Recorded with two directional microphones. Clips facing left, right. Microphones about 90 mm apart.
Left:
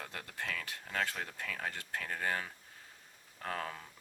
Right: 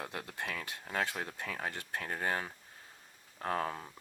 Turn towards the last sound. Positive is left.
turn(degrees=-25)  # may be behind; listen again after turning